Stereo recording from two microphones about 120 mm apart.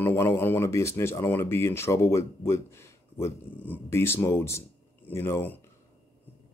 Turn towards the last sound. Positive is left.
turn(degrees=20)  # may be behind; listen again after turning